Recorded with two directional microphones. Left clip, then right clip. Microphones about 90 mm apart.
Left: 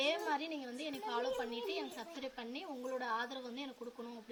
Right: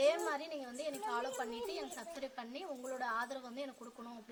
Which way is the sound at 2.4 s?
40° right (ahead or behind).